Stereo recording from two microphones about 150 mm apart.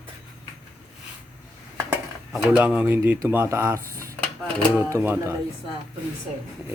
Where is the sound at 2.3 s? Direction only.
10° right (ahead or behind).